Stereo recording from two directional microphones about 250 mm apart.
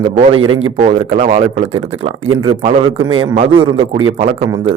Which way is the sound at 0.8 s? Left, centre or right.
Right.